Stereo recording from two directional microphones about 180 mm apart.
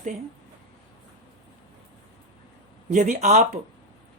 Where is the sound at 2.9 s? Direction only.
45° right (ahead or behind).